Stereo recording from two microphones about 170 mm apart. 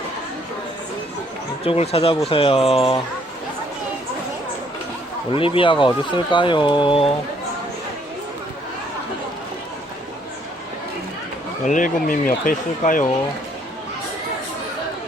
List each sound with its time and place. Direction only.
1.6 s speech: 35° left (ahead or behind)
5.3 s speech: 30° left (ahead or behind)
11.6 s speech: 50° left (ahead or behind)